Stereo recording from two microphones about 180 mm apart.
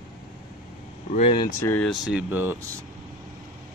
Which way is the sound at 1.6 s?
5° left (ahead or behind).